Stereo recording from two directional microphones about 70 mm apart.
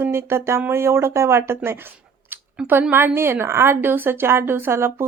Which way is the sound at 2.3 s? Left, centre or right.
Right.